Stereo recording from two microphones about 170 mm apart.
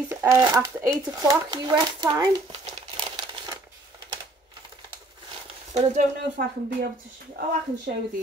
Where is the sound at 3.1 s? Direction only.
25° right (ahead or behind).